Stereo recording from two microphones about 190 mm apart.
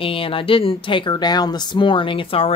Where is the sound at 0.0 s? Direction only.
30° left (ahead or behind).